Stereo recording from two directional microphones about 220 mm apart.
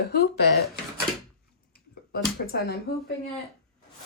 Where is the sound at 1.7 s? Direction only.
45° left (ahead or behind).